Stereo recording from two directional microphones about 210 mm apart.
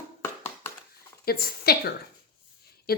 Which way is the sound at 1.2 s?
45° left (ahead or behind).